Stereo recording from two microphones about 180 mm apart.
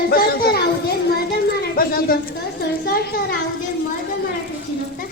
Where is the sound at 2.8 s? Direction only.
65° left (ahead or behind).